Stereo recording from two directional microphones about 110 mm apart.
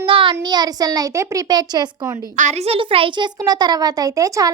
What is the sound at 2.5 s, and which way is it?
Speech, 70° right (ahead or behind).